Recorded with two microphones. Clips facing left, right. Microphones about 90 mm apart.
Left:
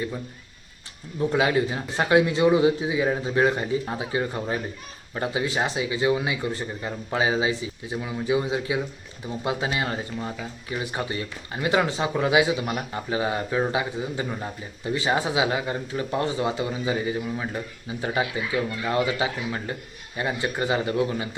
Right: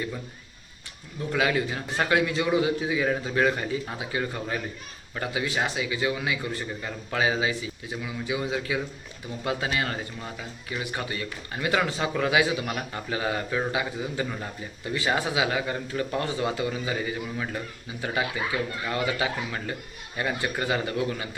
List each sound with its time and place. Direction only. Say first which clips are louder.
1.3 s speech: left 2 dB; 25° left (ahead or behind)